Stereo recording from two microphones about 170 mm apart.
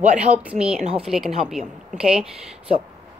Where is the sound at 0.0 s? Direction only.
45° right (ahead or behind).